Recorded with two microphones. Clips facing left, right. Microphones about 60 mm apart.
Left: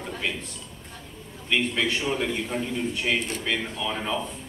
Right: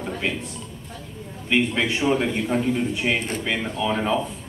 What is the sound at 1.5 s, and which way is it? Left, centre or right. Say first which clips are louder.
A man's voice: right 3 dB; right.